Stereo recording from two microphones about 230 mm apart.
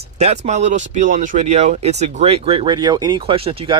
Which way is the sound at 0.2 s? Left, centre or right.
Right.